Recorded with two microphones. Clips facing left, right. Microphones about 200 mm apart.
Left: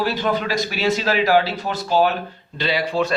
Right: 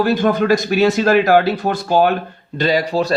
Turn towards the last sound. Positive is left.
turn(degrees=-40)  # may be behind; listen again after turning